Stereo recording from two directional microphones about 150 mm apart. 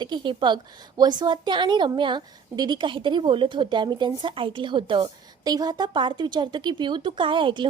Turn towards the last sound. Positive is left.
turn(degrees=-35)  # may be behind; listen again after turning